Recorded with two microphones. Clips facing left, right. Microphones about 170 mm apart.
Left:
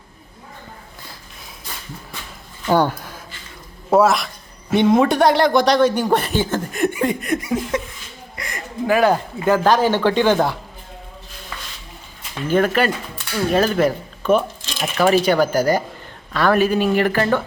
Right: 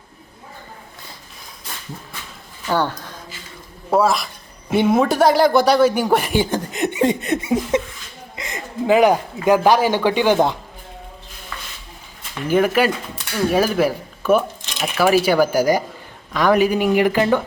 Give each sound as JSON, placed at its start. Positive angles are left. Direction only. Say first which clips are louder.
{"t": 2.6, "sound": "a man's voice", "louder": "left 4 dB", "side_deg": 10}
{"t": 7.7, "sound": "a sound", "louder": "right 4 dB", "side_deg": -25}
{"t": 8.4, "sound": "speech", "louder": "right 1 dB", "side_deg": -20}
{"t": 12.5, "sound": "speech", "louder": "right 1 dB", "side_deg": -10}